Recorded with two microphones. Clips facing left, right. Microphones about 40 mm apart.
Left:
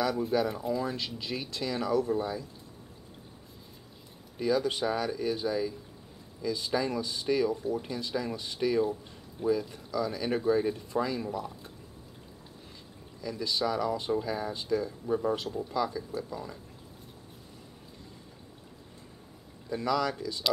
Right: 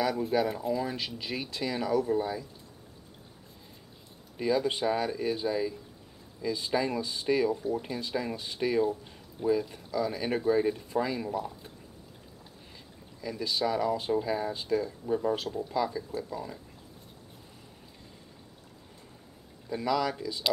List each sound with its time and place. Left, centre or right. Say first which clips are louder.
0.0 s speech: even; centre
4.4 s speech: even; centre
13.2 s speech: even; centre
19.7 s speech: even; centre